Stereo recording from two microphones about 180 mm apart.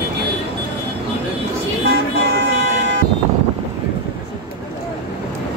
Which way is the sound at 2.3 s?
75° right (ahead or behind).